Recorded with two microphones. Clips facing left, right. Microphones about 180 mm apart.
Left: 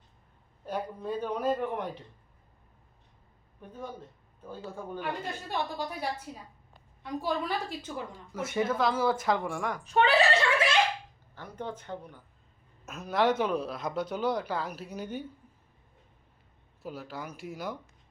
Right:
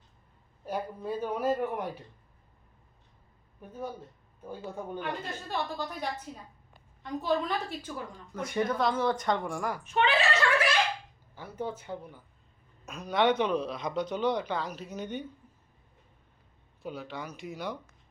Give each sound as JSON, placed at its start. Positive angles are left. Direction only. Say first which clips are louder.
{"t": 0.6, "sound": "a man's voice", "louder": "even", "side_deg": -10}
{"t": 3.6, "sound": "a man's voice", "louder": "right 2 dB", "side_deg": -10}
{"t": 4.9, "sound": "a woman's voice", "louder": "left 1 dB", "side_deg": 10}
{"t": 7.8, "sound": "a woman's voice", "louder": "left 1 dB", "side_deg": 20}
{"t": 8.1, "sound": "speech", "louder": "even", "side_deg": 5}
{"t": 9.8, "sound": "a woman's voice", "louder": "left 4 dB", "side_deg": 40}
{"t": 11.3, "sound": "a man's voice", "louder": "right 2 dB", "side_deg": -10}
{"t": 12.8, "sound": "speech", "louder": "even", "side_deg": 5}
{"t": 16.8, "sound": "speech", "louder": "right 1 dB", "side_deg": 5}